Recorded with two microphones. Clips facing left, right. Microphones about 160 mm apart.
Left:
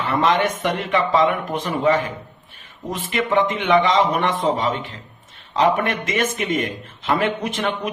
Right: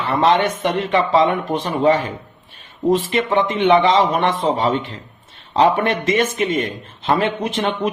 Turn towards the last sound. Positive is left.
turn(degrees=-30)  # may be behind; listen again after turning